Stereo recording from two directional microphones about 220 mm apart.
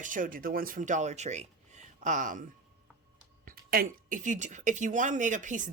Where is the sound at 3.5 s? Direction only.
40° right (ahead or behind).